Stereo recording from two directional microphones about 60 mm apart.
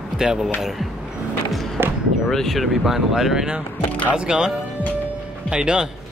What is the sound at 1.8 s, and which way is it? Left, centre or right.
Basketball bounce, right.